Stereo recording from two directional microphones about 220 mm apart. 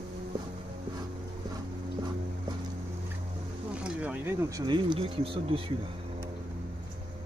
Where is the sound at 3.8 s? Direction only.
5° right (ahead or behind).